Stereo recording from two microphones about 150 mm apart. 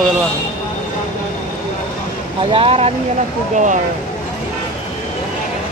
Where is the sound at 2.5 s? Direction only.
40° right (ahead or behind).